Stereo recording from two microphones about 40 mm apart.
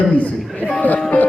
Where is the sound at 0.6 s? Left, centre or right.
Right.